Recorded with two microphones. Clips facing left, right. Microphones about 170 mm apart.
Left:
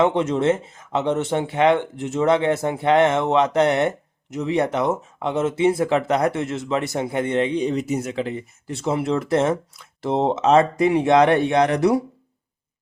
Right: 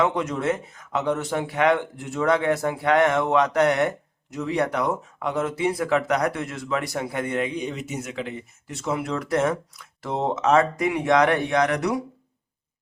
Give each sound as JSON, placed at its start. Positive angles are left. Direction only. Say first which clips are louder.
{"t": 0.0, "sound": "speech", "louder": "left 5 dB", "side_deg": 25}